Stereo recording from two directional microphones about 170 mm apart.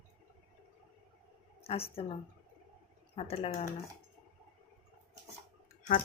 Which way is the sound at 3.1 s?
35° left (ahead or behind).